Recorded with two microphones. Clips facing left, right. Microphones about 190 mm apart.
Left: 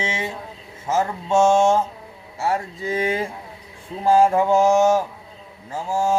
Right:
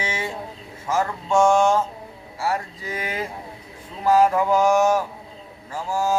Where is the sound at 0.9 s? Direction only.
25° left (ahead or behind).